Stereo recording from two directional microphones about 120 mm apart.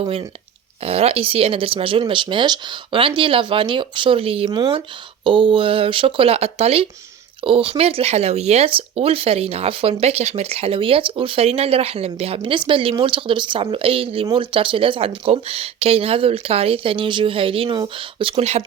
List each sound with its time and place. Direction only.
0.8 s speech: 55° right (ahead or behind)